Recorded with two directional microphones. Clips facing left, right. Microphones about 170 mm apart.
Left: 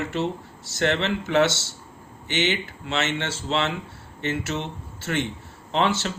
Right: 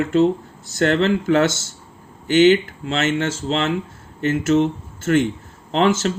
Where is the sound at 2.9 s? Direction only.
45° right (ahead or behind).